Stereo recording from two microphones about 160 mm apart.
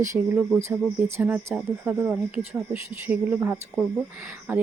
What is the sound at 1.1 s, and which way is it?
Speech, 15° right (ahead or behind).